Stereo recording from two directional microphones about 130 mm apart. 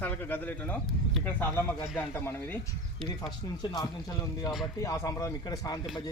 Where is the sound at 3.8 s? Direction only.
30° left (ahead or behind).